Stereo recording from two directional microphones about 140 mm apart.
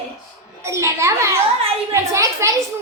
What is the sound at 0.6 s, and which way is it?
A woman's voice, 20° right (ahead or behind).